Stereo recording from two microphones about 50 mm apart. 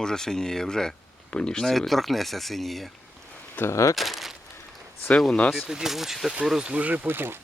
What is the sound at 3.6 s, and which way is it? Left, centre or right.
Speech, left.